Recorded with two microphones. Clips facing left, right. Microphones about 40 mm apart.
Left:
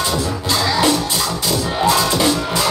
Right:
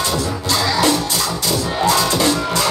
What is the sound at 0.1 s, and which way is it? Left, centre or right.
Music, centre.